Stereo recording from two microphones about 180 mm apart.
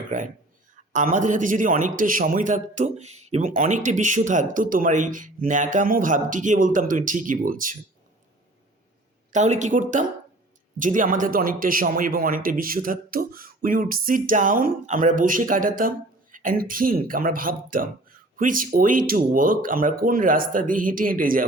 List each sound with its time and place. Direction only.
0.1 s a man's voice: 45° right (ahead or behind)
9.3 s a man's voice: 40° right (ahead or behind)